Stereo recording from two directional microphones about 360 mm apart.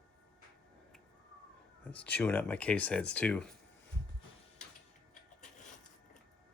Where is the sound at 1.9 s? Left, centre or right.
Centre.